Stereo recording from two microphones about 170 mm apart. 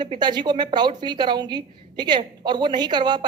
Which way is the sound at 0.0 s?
25° right (ahead or behind).